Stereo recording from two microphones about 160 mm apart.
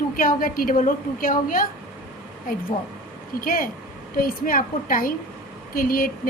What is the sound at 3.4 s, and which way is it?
A woman's voice, 60° left (ahead or behind).